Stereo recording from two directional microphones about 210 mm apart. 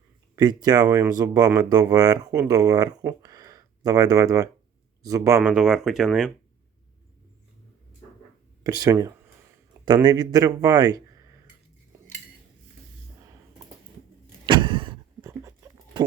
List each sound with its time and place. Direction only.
0.3 s speech: 20° right (ahead or behind)
5.4 s speech: 5° right (ahead or behind)
8.6 s speech: 15° right (ahead or behind)
14.4 s vehicle: 20° right (ahead or behind)